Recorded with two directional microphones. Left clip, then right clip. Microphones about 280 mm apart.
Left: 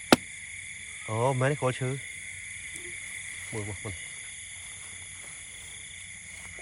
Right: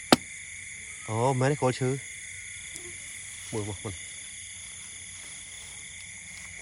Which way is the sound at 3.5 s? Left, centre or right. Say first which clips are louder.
Right 5 dB; centre.